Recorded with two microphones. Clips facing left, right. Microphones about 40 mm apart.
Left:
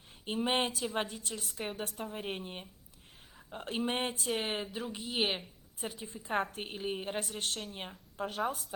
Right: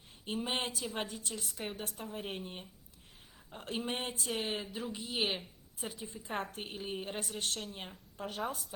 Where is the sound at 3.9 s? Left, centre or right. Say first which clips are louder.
Left 4 dB; left.